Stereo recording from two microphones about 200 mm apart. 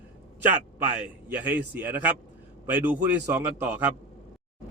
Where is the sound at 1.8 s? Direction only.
10° right (ahead or behind).